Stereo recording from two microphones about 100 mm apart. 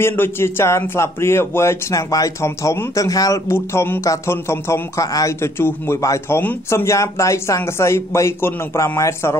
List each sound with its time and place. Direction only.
0.0 s a man's voice: 25° left (ahead or behind)
3.4 s a man's voice: 25° left (ahead or behind)